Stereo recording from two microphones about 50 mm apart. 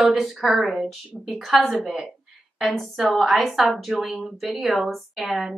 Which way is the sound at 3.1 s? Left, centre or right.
Centre.